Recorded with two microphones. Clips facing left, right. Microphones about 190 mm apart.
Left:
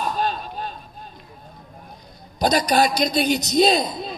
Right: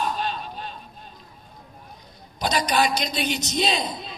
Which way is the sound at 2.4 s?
40° left (ahead or behind).